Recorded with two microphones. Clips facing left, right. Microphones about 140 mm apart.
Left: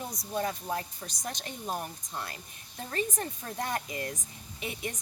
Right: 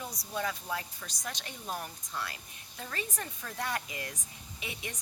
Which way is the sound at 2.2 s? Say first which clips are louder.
Even; 40° left (ahead or behind).